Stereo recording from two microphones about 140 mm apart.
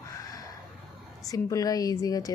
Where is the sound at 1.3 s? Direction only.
25° left (ahead or behind).